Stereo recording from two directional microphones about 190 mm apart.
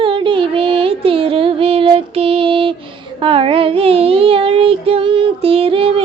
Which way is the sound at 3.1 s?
25° right (ahead or behind).